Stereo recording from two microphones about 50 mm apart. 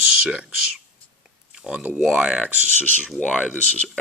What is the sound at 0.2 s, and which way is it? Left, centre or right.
Speech, centre.